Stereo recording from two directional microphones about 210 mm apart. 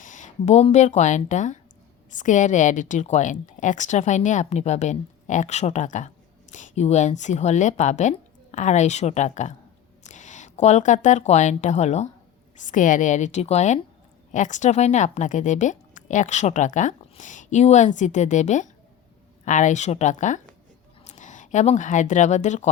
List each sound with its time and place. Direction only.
0.0 s a woman's voice: 35° left (ahead or behind)